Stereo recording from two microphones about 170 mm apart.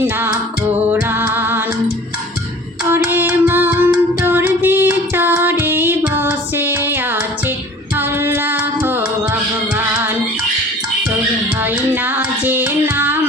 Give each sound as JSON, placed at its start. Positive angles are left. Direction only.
{"t": 0.0, "sound": "music", "side_deg": -10}
{"t": 2.9, "sound": "music", "side_deg": -10}
{"t": 11.6, "sound": "music", "side_deg": -10}